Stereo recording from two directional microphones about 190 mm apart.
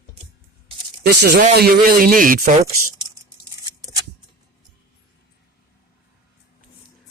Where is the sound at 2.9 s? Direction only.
20° right (ahead or behind).